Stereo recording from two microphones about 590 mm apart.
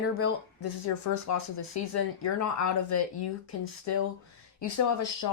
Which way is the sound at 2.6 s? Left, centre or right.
Left.